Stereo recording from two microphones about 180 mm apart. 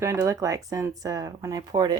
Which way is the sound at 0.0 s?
15° right (ahead or behind).